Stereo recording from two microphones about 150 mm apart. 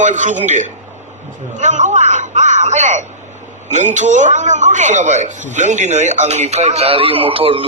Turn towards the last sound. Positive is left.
turn(degrees=-35)  # may be behind; listen again after turning